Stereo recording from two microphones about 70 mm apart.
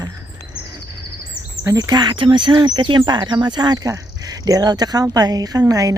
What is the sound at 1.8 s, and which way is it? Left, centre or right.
Speech, right.